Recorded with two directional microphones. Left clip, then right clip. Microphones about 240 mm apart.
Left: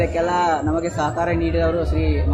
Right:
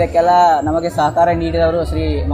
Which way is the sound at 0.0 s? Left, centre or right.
Right.